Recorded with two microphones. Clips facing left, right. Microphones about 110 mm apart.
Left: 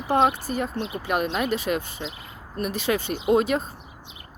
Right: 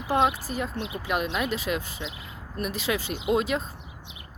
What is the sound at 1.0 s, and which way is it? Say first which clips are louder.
Speech: left 3 dB; 45° left (ahead or behind).